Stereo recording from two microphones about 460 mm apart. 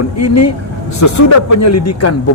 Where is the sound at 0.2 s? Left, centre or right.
Left.